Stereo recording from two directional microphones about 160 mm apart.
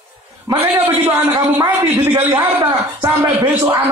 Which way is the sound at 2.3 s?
20° right (ahead or behind).